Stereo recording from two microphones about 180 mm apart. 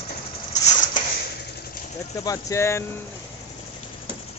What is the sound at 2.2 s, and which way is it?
Speech, 20° left (ahead or behind).